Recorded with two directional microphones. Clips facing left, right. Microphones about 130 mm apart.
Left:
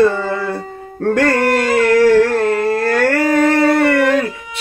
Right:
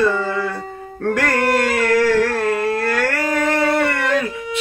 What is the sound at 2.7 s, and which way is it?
Dog, 35° left (ahead or behind).